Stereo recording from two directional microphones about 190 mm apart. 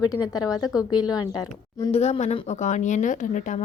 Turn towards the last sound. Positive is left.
turn(degrees=40)  # may be behind; listen again after turning